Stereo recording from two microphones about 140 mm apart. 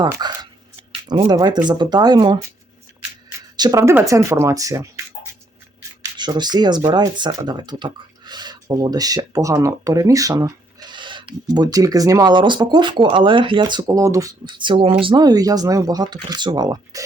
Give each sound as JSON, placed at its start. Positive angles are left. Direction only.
{"t": 0.0, "sound": "speech", "side_deg": -30}
{"t": 3.6, "sound": "speech", "side_deg": -25}
{"t": 6.1, "sound": "speech", "side_deg": -30}
{"t": 14.4, "sound": "speech", "side_deg": -35}